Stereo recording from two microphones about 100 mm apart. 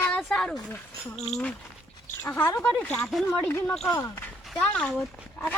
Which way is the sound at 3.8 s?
30° left (ahead or behind).